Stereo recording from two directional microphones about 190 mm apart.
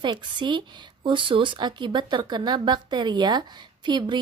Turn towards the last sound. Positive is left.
turn(degrees=-25)  # may be behind; listen again after turning